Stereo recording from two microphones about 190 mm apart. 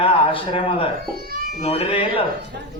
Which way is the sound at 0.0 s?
30° left (ahead or behind).